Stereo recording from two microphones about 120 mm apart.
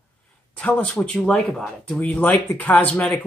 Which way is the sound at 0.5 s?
10° left (ahead or behind).